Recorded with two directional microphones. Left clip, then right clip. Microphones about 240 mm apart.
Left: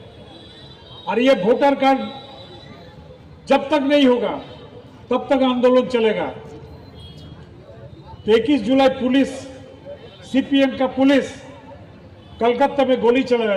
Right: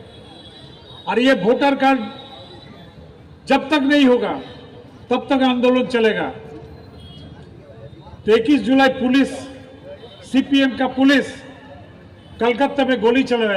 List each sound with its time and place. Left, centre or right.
1.0 s a man's voice: right
3.5 s a man's voice: right
8.2 s a man's voice: right
12.4 s a man's voice: right